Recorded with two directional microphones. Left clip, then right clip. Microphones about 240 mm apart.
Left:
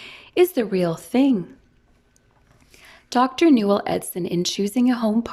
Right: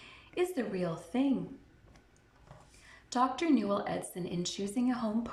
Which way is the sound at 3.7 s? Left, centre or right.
Left.